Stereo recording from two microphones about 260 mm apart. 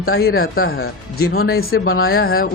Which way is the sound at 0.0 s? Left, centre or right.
Left.